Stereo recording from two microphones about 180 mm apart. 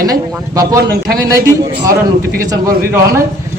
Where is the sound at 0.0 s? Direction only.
20° right (ahead or behind).